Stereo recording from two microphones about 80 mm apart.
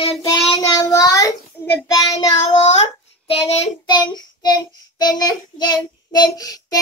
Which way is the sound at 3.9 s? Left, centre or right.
Left.